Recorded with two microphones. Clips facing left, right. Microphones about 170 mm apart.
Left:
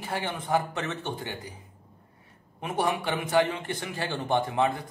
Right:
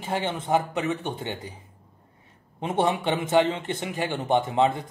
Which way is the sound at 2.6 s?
25° right (ahead or behind).